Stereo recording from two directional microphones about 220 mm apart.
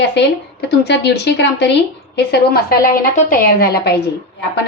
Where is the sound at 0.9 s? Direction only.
50° left (ahead or behind).